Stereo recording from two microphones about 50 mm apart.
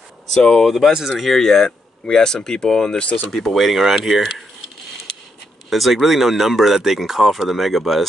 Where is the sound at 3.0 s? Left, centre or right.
Left.